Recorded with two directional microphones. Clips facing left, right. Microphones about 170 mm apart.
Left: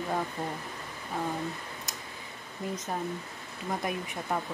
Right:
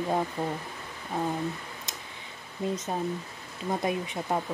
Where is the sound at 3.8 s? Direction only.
20° right (ahead or behind).